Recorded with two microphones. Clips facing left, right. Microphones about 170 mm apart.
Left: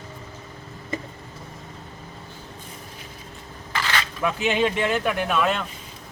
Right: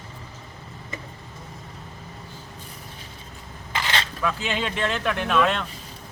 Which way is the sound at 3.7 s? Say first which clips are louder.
Even; 20° right (ahead or behind).